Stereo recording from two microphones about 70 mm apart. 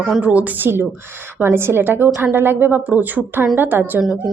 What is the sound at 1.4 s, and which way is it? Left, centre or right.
A woman's voice, right.